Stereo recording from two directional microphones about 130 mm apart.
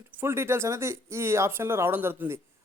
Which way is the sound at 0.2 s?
20° right (ahead or behind).